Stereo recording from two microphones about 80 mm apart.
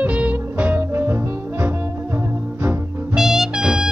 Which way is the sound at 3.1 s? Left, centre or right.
Centre.